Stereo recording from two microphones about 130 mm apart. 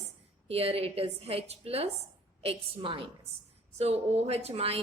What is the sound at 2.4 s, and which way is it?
Speech, 40° right (ahead or behind).